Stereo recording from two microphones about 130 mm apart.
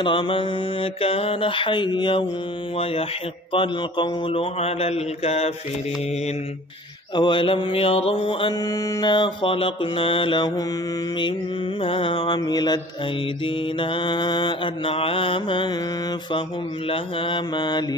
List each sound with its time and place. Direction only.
0.0 s mantra: 40° left (ahead or behind)
7.2 s mantra: 35° left (ahead or behind)
11.8 s mantra: 40° left (ahead or behind)
16.9 s mantra: 40° left (ahead or behind)